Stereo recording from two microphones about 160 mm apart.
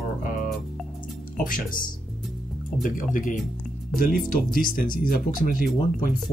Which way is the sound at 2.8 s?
55° left (ahead or behind).